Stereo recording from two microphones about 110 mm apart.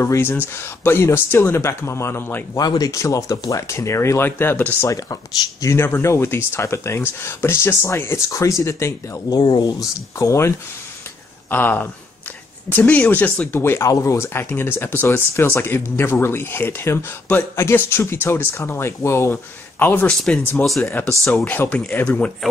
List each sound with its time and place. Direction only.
0.0 s speech: 20° left (ahead or behind)
2.6 s speech: 35° left (ahead or behind); by 4.8 s 15° left (ahead or behind)
4.8 s speech: 30° left (ahead or behind)
9.4 s speech: 40° left (ahead or behind)
11.5 s speech: 15° left (ahead or behind)
20.1 s speech: 5° left (ahead or behind)